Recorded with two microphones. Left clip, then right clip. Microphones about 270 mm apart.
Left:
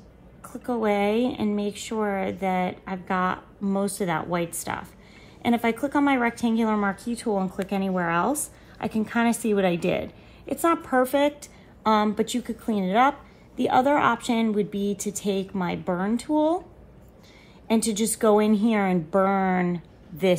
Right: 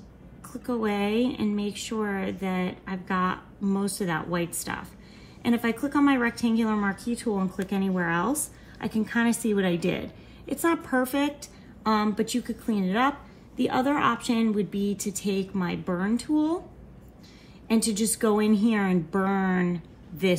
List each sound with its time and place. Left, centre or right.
0.7 s a woman's voice: left
17.6 s a woman's voice: left